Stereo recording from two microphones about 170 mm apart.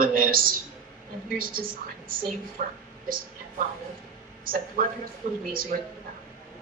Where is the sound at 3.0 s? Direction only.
55° right (ahead or behind).